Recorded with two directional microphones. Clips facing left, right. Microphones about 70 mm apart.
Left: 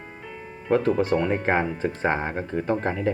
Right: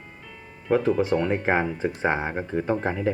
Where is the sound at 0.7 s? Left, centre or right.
Centre.